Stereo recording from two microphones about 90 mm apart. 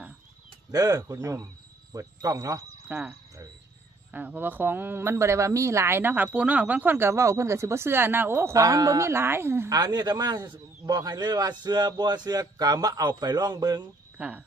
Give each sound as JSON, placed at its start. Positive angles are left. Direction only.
{"t": 0.7, "sound": "a man's voice", "side_deg": -45}
{"t": 2.9, "sound": "speech", "side_deg": -20}
{"t": 7.1, "sound": "speech", "side_deg": -35}
{"t": 9.7, "sound": "a man's voice", "side_deg": -45}
{"t": 14.2, "sound": "speech", "side_deg": -15}